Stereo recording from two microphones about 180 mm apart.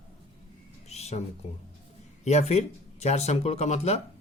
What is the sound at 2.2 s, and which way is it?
A man's voice, 40° left (ahead or behind).